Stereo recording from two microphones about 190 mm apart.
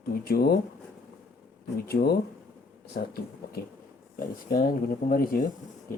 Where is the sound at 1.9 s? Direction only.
55° left (ahead or behind).